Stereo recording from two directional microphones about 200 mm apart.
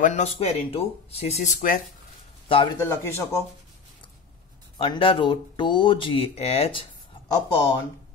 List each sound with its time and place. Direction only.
0.0 s speech: 35° left (ahead or behind)
2.4 s speech: 25° left (ahead or behind)
2.8 s speech: 10° left (ahead or behind)
4.7 s speech: 25° left (ahead or behind)
7.2 s speech: 20° left (ahead or behind)